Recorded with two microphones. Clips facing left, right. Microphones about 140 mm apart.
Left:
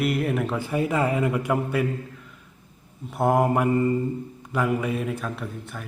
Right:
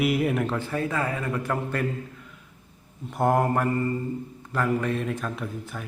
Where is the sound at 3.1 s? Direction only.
5° left (ahead or behind).